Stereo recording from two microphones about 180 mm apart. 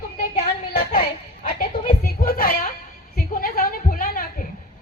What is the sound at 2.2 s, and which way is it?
Music, 55° left (ahead or behind).